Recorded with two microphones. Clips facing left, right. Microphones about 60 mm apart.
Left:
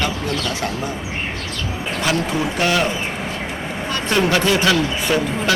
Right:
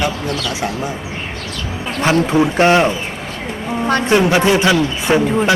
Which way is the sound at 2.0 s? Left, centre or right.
Right.